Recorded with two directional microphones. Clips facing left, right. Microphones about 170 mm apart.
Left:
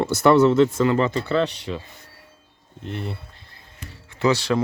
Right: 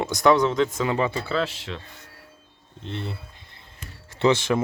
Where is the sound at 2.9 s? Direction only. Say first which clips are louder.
Left 2 dB; 5° left (ahead or behind).